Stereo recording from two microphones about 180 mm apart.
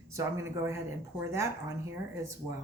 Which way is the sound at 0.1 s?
15° right (ahead or behind).